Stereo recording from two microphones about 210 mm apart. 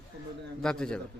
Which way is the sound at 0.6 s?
5° left (ahead or behind).